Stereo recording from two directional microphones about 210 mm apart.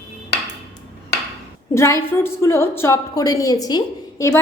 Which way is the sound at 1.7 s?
15° left (ahead or behind).